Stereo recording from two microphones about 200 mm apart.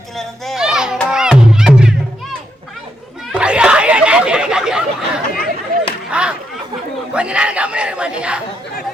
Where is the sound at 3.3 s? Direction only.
5° right (ahead or behind).